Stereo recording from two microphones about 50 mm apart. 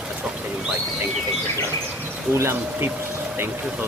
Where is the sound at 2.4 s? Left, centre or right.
Right.